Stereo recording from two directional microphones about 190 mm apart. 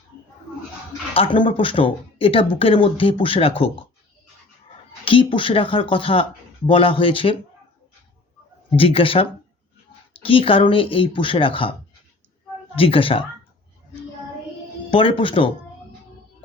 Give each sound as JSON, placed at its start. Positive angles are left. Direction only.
{"t": 1.1, "sound": "speech", "side_deg": 25}
{"t": 5.0, "sound": "speech", "side_deg": 25}
{"t": 8.7, "sound": "speech", "side_deg": 30}
{"t": 10.2, "sound": "speech", "side_deg": 30}
{"t": 12.7, "sound": "speech", "side_deg": 30}
{"t": 14.8, "sound": "speech", "side_deg": 30}